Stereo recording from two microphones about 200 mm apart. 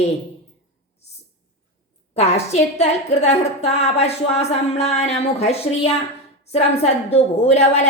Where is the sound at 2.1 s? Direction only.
30° left (ahead or behind).